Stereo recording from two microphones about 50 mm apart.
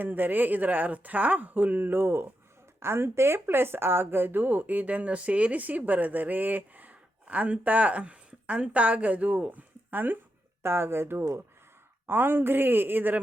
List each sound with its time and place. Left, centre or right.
0.0 s speech: right
2.8 s speech: right
10.6 s a woman's voice: right